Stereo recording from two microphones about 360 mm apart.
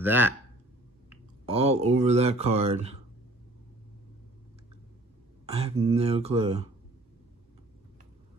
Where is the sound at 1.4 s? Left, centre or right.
Centre.